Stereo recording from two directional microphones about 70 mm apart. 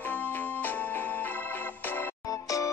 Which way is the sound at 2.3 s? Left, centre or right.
Left.